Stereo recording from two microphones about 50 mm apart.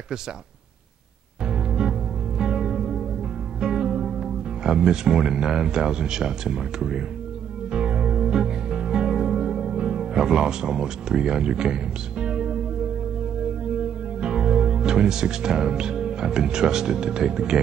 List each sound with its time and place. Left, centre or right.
1.4 s music: centre
4.2 s speech: centre
7.7 s music: centre
13.7 s speech: centre